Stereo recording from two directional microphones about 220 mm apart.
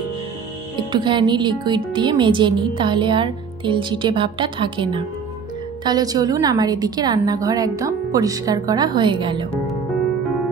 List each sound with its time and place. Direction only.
0.9 s a woman's voice: 20° right (ahead or behind)